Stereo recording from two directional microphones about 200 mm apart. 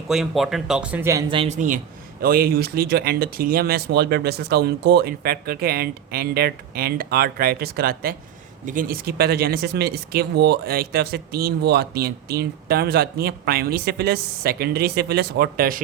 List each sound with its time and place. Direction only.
0.1 s speech: centre (ahead or behind)
1.3 s speech: 30° right (ahead or behind); by 15.8 s 45° right (ahead or behind)